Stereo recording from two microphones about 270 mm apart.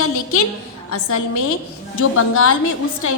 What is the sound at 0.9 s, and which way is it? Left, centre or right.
Speech, left.